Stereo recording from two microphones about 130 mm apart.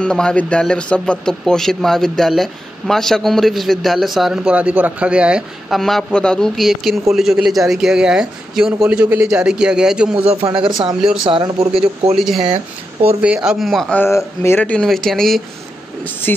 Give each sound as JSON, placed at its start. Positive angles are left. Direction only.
{"t": 0.0, "sound": "a man's voice", "side_deg": 5}
{"t": 5.8, "sound": "a man's voice", "side_deg": 5}
{"t": 10.4, "sound": "speech", "side_deg": -40}
{"t": 12.2, "sound": "a man's voice", "side_deg": -5}
{"t": 13.9, "sound": "speech", "side_deg": 20}
{"t": 16.3, "sound": "speech", "side_deg": 15}